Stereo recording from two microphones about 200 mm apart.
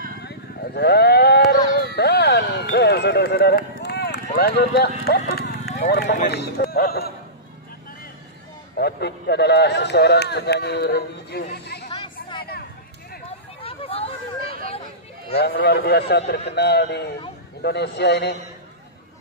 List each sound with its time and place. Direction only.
0.7 s a sound: 55° left (ahead or behind)
4.3 s speech: 50° left (ahead or behind)
5.3 s run: 50° left (ahead or behind)
6.2 s speech: 55° left (ahead or behind)
8.7 s a man's voice: 55° left (ahead or behind)
11.5 s chatter: 55° left (ahead or behind)
13.6 s hubbub: 30° left (ahead or behind)
15.3 s a man's voice: 55° left (ahead or behind)